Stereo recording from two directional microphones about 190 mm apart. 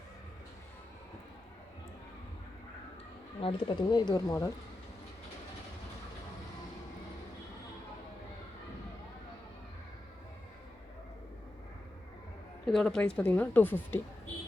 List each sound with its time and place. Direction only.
3.4 s speech: 25° left (ahead or behind)
12.6 s a woman's voice: 5° left (ahead or behind)